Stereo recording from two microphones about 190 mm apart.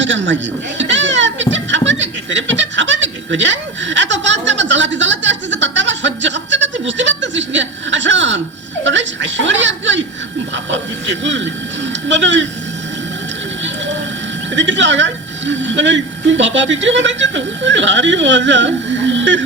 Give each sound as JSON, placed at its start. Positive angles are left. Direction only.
{"t": 0.0, "sound": "speech", "side_deg": -75}
{"t": 0.8, "sound": "goat", "side_deg": -75}
{"t": 8.8, "sound": "speech", "side_deg": -75}
{"t": 14.5, "sound": "speech", "side_deg": -75}